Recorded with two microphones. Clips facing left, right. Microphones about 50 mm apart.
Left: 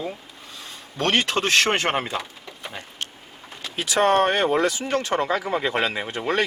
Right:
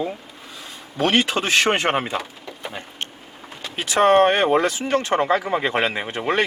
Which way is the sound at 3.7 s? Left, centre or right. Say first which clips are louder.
Right 4 dB; right.